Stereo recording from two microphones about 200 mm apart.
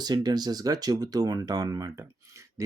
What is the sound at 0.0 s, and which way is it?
Speech, 20° right (ahead or behind).